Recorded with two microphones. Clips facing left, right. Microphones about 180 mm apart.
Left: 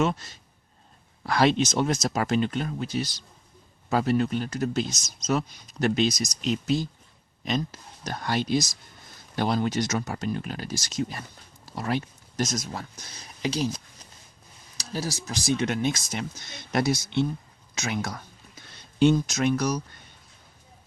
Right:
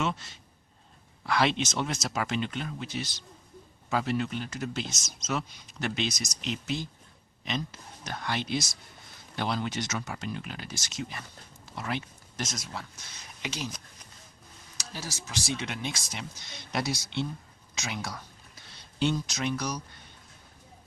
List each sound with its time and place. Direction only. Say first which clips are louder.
0.0 s speech: left 6 dB; 40° left (ahead or behind)